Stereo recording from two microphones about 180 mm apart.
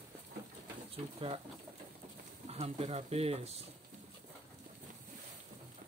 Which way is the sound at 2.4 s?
35° right (ahead or behind).